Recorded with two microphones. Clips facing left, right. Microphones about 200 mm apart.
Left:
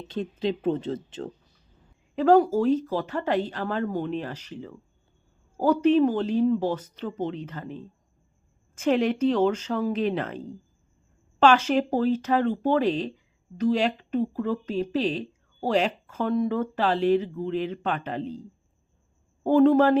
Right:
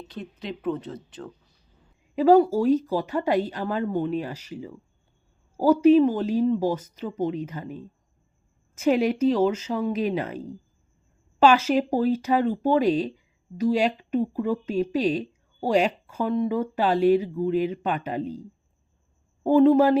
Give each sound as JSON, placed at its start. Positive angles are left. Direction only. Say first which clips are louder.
{"t": 0.1, "sound": "speech", "louder": "left 9 dB", "side_deg": 25}
{"t": 2.1, "sound": "speech", "louder": "right 2 dB", "side_deg": -10}
{"t": 19.4, "sound": "speech", "louder": "right 1 dB", "side_deg": -5}